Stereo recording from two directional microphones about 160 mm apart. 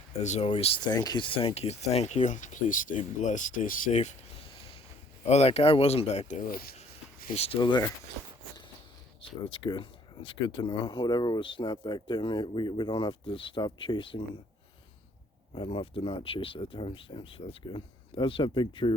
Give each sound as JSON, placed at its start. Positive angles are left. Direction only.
{"t": 0.2, "sound": "speech", "side_deg": 45}
{"t": 0.4, "sound": "speech", "side_deg": 35}
{"t": 5.2, "sound": "speech", "side_deg": 40}
{"t": 7.3, "sound": "speech", "side_deg": 35}
{"t": 9.2, "sound": "speech", "side_deg": 35}
{"t": 15.5, "sound": "speech", "side_deg": 35}